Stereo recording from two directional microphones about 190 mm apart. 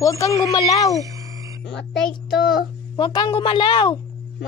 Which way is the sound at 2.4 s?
Centre (ahead or behind).